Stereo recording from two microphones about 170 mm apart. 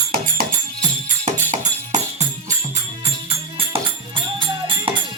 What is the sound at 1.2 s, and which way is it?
Music, 45° right (ahead or behind).